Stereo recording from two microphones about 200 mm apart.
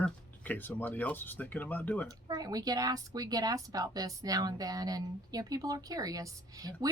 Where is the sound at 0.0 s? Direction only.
10° left (ahead or behind).